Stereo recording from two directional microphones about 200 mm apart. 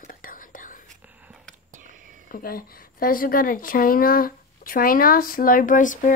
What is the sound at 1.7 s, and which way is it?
Whispering, 40° right (ahead or behind).